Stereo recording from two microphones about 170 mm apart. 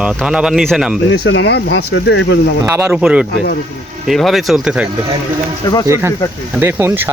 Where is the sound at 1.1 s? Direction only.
85° left.